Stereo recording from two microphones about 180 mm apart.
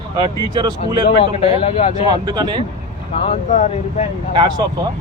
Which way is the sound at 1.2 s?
35° left (ahead or behind).